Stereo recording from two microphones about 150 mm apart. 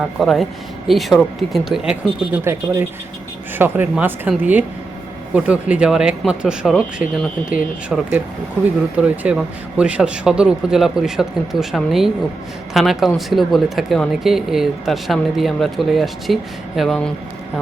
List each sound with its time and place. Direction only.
0.2 s speech: centre (ahead or behind)
2.4 s speech: 15° right (ahead or behind); by 17.1 s centre (ahead or behind)